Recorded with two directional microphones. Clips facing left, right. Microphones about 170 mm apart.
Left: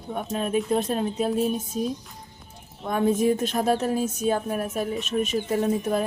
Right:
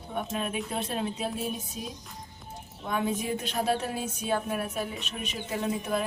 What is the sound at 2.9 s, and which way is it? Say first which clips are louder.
Speech: left 8 dB; 45° left (ahead or behind).